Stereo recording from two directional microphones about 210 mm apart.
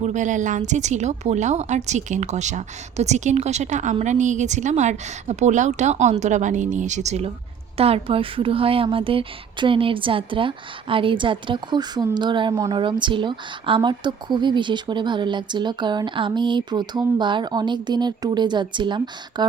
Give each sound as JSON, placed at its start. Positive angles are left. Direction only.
{"t": 0.0, "sound": "a woman's voice", "side_deg": -35}